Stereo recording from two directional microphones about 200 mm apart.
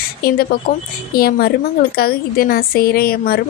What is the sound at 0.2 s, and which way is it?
A woman's voice, 50° left (ahead or behind).